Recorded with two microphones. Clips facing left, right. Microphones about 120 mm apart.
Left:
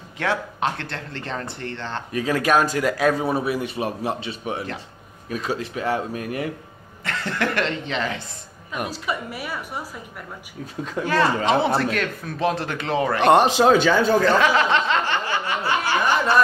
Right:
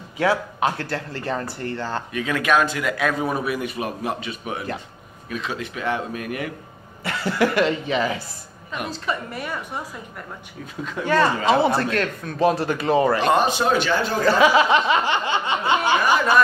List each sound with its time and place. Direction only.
0.2 s speech: 5° right (ahead or behind)
2.1 s a man's voice: 35° left (ahead or behind)
7.1 s speech: 10° right (ahead or behind)
8.7 s a woman's voice: 10° left (ahead or behind)
11.1 s speech: centre (ahead or behind)
13.2 s a man's voice: 80° left
14.2 s a sound: 10° right (ahead or behind)